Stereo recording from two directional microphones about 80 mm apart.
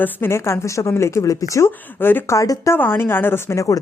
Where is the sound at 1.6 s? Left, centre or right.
Left.